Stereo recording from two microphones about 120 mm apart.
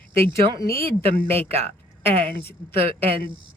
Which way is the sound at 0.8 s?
55° right (ahead or behind).